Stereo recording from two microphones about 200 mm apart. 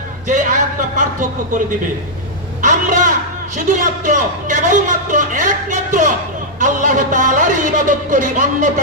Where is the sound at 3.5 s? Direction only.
40° right (ahead or behind).